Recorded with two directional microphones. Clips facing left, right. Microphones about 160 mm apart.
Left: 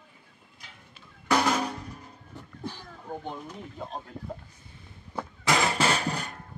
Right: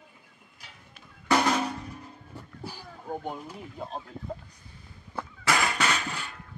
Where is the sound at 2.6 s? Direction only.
10° right (ahead or behind).